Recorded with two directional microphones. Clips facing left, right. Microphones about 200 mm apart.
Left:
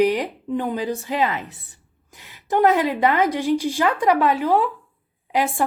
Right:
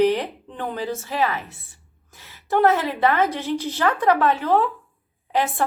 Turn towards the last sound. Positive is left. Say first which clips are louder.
# left 1 dB
turn(degrees=10)  # may be behind; listen again after turning